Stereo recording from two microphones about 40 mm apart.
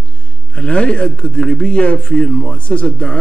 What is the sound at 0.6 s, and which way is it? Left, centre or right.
A man's voice, left.